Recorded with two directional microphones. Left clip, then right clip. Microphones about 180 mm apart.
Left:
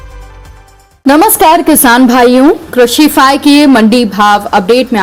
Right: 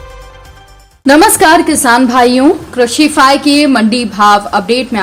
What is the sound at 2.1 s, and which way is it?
A woman's voice, 30° left (ahead or behind).